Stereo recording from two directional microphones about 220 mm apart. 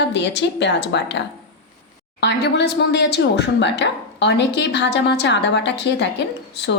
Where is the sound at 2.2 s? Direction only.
50° left (ahead or behind).